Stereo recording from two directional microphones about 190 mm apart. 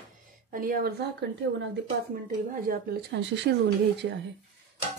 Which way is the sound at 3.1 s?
65° right (ahead or behind).